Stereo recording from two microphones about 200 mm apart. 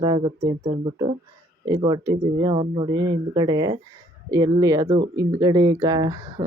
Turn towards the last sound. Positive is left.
turn(degrees=-20)  # may be behind; listen again after turning